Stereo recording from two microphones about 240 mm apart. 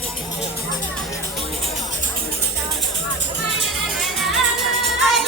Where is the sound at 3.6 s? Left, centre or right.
Centre.